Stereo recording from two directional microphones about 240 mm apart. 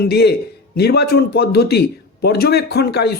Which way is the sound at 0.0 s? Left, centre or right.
Left.